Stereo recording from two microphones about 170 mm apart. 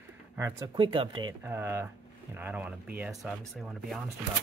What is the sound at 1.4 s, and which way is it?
Speech, 15° right (ahead or behind).